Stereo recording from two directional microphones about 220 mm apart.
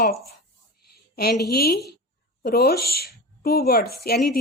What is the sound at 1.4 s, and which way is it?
A woman's voice, 45° left (ahead or behind).